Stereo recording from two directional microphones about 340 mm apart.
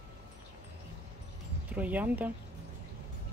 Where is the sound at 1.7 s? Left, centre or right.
Centre.